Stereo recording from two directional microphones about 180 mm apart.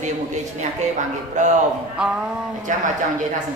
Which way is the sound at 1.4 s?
40° right (ahead or behind).